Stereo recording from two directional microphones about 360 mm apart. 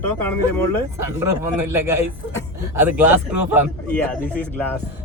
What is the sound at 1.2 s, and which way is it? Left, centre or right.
A man's voice, centre.